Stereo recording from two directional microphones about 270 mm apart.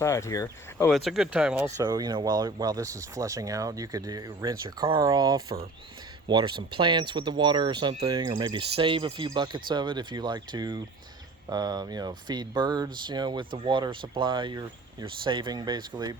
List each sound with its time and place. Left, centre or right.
0.0 s speech: centre